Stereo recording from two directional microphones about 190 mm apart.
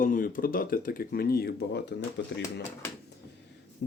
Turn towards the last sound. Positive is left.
turn(degrees=70)  # may be behind; listen again after turning